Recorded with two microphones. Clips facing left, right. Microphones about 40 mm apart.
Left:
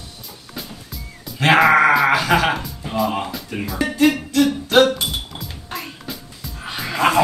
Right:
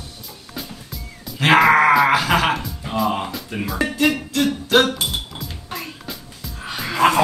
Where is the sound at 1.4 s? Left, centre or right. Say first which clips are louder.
Even; centre.